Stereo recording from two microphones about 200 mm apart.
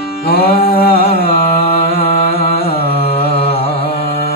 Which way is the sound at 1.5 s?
30° left (ahead or behind).